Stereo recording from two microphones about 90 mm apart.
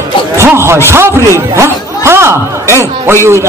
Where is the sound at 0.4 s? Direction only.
30° right (ahead or behind).